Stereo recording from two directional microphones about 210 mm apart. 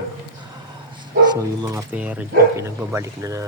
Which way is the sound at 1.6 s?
15° right (ahead or behind).